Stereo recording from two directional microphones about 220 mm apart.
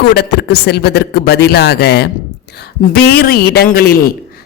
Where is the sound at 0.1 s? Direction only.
50° left (ahead or behind).